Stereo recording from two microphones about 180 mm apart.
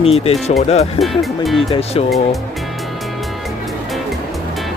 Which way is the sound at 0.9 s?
Centre (ahead or behind).